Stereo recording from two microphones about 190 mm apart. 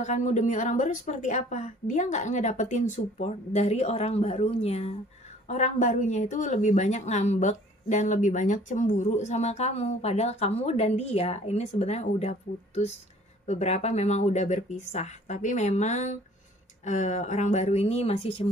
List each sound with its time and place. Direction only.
0.0 s speech: 40° left (ahead or behind)